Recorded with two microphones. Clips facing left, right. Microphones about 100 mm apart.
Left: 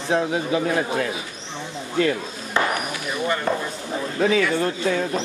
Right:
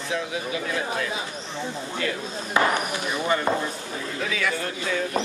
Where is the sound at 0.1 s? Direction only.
35° left (ahead or behind).